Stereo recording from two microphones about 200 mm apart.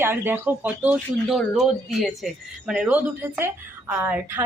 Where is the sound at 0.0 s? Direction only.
10° right (ahead or behind).